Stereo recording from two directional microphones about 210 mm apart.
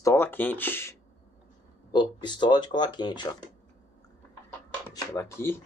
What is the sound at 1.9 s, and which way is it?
Speech, 20° left (ahead or behind).